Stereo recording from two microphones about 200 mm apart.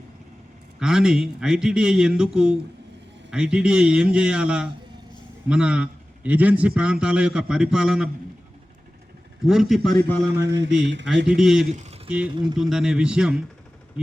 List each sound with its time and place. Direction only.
0.8 s a man's voice: 5° right (ahead or behind)
9.4 s a man's voice: centre (ahead or behind)
10.4 s mantra: 60° right (ahead or behind)
11.3 s a man's voice: 5° right (ahead or behind)
12.3 s speech: 20° right (ahead or behind)
12.5 s a man's voice: centre (ahead or behind)